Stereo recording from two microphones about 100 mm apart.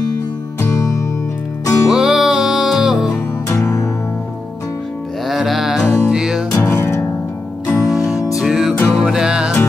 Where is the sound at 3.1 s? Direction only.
30° left (ahead or behind).